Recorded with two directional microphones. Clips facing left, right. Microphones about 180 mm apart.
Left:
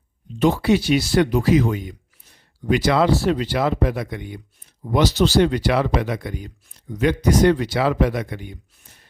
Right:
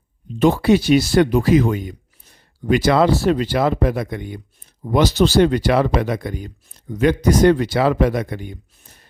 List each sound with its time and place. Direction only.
0.3 s speech: 55° right (ahead or behind)